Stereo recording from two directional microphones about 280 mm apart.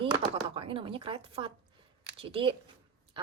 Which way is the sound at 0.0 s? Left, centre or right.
Centre.